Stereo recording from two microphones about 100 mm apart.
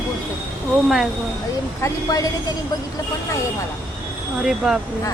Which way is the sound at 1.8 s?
35° left (ahead or behind).